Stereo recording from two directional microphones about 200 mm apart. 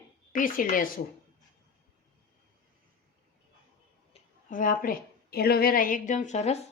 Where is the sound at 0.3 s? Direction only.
40° left (ahead or behind).